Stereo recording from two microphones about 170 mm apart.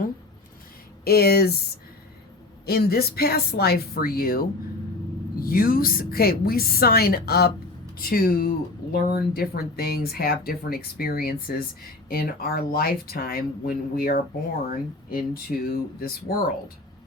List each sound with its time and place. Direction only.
1.0 s speech: 65° left (ahead or behind)
2.6 s speech: 65° left (ahead or behind)